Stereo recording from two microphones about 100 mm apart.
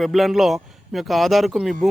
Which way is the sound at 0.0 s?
Centre (ahead or behind).